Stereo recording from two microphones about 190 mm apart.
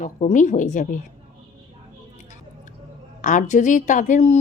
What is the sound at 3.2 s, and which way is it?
A woman's voice, 40° left (ahead or behind).